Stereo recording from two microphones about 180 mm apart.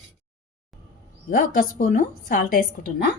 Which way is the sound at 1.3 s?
50° left (ahead or behind).